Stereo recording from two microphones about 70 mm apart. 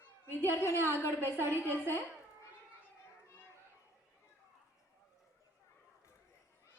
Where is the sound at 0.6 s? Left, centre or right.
Left.